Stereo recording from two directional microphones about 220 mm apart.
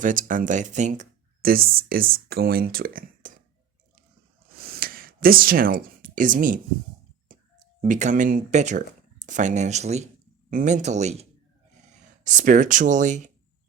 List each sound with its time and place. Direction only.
0.0 s speech: 35° right (ahead or behind)
4.5 s a sound: 45° right (ahead or behind)
7.8 s speech: 35° right (ahead or behind)